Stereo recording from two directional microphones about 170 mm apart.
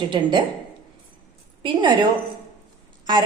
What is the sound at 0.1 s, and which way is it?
Speech, 25° right (ahead or behind).